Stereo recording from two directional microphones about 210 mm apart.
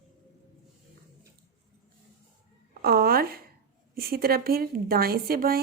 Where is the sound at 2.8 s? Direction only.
45° right (ahead or behind).